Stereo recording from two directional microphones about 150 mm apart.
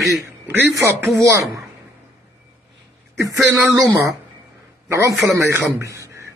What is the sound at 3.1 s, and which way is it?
A man's voice, 20° right (ahead or behind).